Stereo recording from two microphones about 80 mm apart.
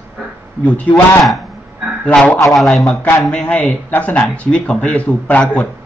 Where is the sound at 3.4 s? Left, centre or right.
Centre.